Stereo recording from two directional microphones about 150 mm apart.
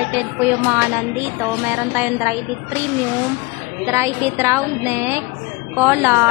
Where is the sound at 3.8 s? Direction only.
15° right (ahead or behind).